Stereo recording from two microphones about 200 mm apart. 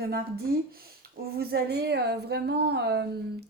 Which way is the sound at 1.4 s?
50° right (ahead or behind).